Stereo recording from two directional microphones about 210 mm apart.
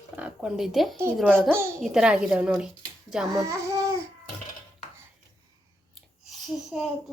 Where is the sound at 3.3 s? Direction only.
15° right (ahead or behind).